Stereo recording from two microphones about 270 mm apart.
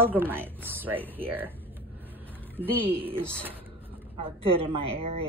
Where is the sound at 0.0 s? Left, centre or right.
Centre.